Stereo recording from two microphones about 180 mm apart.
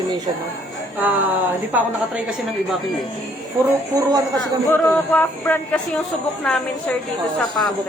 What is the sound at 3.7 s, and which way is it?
Speech, 20° right (ahead or behind).